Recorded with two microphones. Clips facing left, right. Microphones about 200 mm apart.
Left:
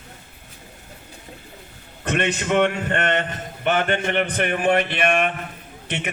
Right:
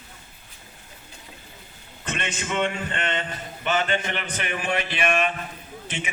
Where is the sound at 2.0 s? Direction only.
65° left (ahead or behind).